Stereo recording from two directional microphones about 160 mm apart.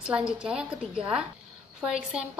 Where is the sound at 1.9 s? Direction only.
5° right (ahead or behind).